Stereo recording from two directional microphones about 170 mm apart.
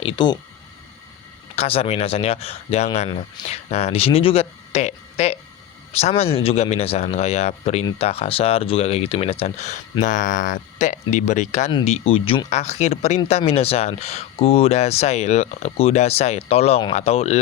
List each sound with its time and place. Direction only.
0.0 s speech: 30° left (ahead or behind)
1.5 s speech: 35° left (ahead or behind)